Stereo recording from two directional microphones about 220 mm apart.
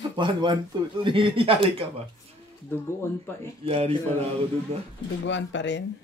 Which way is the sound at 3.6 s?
25° right (ahead or behind).